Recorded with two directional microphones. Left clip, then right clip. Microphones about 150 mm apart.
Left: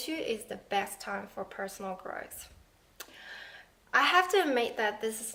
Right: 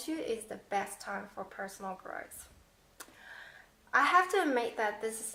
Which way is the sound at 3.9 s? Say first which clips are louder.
Left 1 dB; 20° left (ahead or behind).